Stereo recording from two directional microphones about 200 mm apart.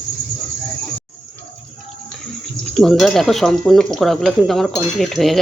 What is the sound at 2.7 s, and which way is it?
Speech, centre (ahead or behind).